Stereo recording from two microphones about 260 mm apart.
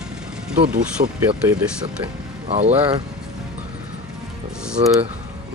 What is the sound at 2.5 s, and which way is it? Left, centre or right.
Speech, right.